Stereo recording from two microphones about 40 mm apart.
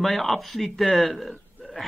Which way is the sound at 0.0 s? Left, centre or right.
Centre.